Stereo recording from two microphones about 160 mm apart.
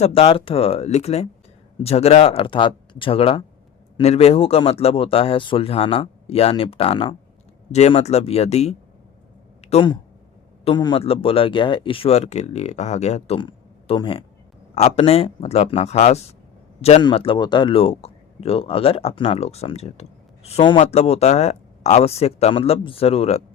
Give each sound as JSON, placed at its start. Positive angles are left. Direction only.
{"t": 0.0, "sound": "a man's voice", "side_deg": 35}
{"t": 17.0, "sound": "speech", "side_deg": 30}